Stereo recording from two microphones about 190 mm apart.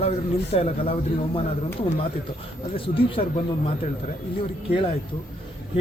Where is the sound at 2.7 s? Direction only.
30° left (ahead or behind).